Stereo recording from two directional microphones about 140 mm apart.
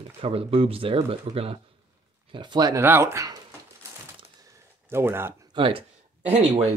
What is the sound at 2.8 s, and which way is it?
Speech, 15° right (ahead or behind).